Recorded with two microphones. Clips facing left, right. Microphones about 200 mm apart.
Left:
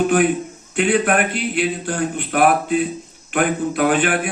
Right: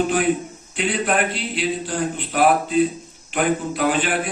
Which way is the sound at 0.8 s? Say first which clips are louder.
Left 4 dB; 55° left (ahead or behind).